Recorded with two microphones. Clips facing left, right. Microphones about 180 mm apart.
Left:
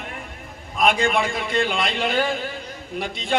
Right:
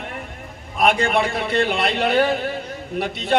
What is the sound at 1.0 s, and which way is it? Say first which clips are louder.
A man's voice: right 2 dB; 60° right (ahead or behind).